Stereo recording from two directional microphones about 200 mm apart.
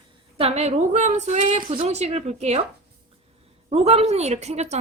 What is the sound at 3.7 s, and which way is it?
A woman's voice, 30° right (ahead or behind).